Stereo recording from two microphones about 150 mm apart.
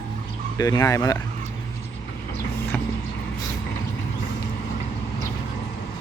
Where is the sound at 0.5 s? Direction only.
25° left (ahead or behind).